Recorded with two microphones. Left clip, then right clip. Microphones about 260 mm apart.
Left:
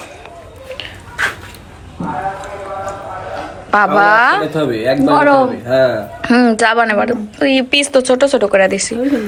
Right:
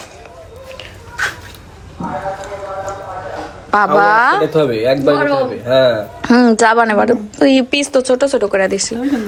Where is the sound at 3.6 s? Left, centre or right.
Centre.